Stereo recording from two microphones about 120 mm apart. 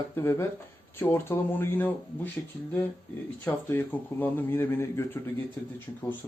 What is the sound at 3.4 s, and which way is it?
Speech, 15° left (ahead or behind).